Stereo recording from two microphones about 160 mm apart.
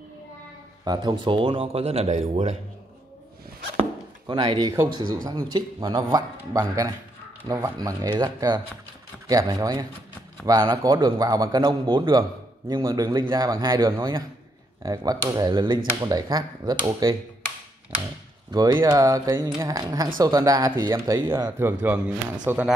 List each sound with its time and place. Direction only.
0.8 s speech: 25° right (ahead or behind); by 2.5 s 40° right (ahead or behind)
4.3 s a man's voice: 30° right (ahead or behind)
18.5 s a man's voice: 25° right (ahead or behind)
21.5 s speech: 10° right (ahead or behind)